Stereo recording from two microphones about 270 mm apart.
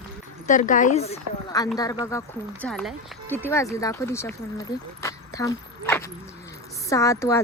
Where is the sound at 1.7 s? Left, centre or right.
Centre.